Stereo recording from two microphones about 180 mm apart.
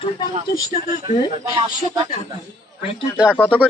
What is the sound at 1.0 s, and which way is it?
Speech, 20° right (ahead or behind).